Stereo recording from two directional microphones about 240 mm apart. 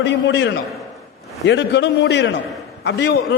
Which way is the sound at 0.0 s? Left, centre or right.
Left.